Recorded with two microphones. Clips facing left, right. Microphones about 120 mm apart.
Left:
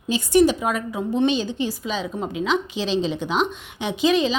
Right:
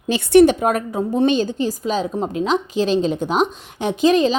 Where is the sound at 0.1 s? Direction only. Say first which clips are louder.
Right 5 dB; 60° right (ahead or behind).